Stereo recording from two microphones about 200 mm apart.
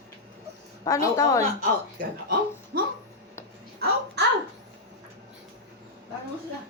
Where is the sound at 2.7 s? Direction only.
50° right (ahead or behind).